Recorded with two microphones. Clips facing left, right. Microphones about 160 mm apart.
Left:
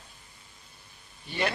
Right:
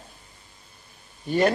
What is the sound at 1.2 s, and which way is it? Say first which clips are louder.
Speech: right 10 dB; 45° right (ahead or behind).